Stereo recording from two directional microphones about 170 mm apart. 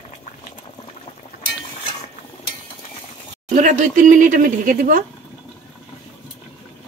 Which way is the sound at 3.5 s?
50° right (ahead or behind).